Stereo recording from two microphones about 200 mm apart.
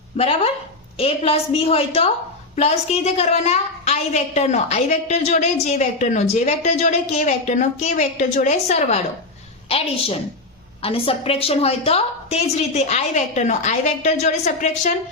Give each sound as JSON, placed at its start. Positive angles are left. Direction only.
{"t": 0.2, "sound": "a woman's voice", "side_deg": 30}